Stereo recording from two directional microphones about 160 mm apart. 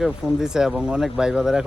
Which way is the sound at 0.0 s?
5° right (ahead or behind).